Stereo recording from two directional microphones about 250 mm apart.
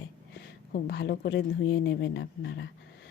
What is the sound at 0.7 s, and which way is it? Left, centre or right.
A woman's voice, left.